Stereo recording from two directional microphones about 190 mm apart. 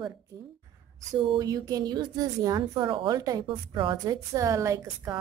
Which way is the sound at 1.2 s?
20° right (ahead or behind).